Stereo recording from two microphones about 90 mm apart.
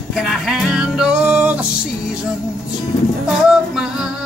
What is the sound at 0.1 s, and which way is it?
Music, 5° right (ahead or behind).